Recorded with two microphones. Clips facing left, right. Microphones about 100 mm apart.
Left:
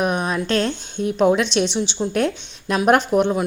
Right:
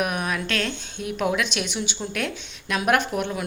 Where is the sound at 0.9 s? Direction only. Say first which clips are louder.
Left 8 dB; 35° left (ahead or behind).